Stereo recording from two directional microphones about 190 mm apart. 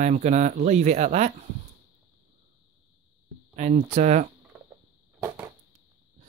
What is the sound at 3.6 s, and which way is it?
Speech, 40° right (ahead or behind).